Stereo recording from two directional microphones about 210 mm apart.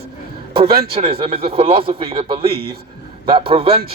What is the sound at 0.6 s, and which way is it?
Speech, 50° right (ahead or behind).